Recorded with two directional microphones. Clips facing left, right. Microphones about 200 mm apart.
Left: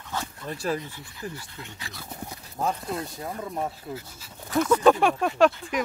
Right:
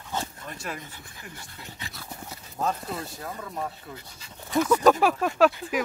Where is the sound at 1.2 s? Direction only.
35° left (ahead or behind).